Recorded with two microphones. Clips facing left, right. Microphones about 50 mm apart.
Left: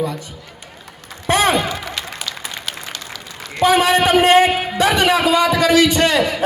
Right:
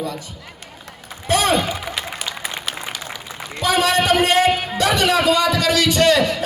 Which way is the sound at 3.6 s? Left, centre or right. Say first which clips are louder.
Left 4 dB; left.